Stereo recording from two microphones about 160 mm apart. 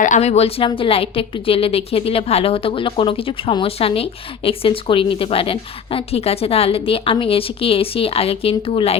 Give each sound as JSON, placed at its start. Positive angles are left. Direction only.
{"t": 0.0, "sound": "a woman's voice", "side_deg": 45}